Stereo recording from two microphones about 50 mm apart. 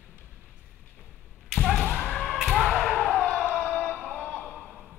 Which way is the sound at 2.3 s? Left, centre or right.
Centre.